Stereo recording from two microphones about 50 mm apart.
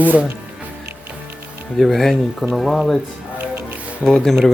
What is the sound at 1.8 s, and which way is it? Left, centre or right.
Speech, centre.